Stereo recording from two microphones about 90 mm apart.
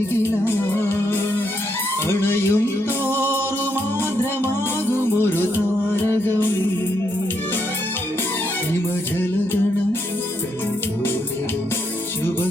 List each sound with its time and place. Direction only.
0.1 s music: 25° left (ahead or behind)
2.0 s a sound: 25° left (ahead or behind)
3.1 s music: 25° left (ahead or behind)
6.1 s music: 25° left (ahead or behind)